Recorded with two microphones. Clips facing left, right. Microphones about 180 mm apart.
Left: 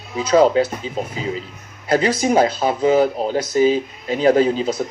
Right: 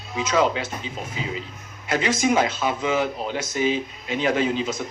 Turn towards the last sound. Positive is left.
turn(degrees=35)  # may be behind; listen again after turning